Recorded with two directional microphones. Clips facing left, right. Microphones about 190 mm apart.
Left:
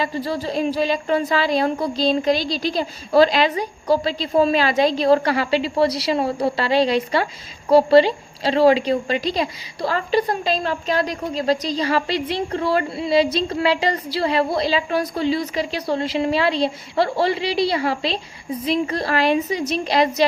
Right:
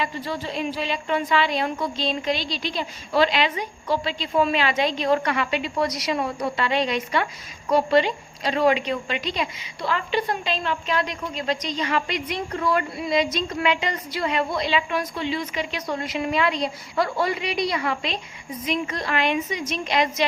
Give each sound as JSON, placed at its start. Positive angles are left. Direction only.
{"t": 0.0, "sound": "a woman's voice", "side_deg": 35}